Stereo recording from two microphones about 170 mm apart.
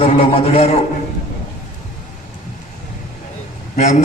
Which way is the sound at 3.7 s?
45° left (ahead or behind).